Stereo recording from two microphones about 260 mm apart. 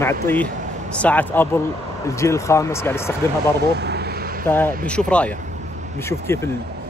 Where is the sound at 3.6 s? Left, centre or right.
Right.